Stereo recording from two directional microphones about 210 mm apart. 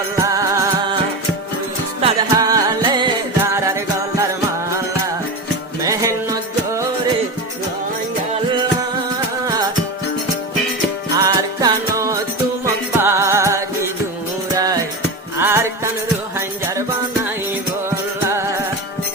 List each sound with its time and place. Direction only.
0.3 s music: 15° right (ahead or behind)
2.0 s music: 30° right (ahead or behind); by 4.3 s 10° right (ahead or behind)
5.8 s music: 15° right (ahead or behind)
11.2 s music: 15° right (ahead or behind)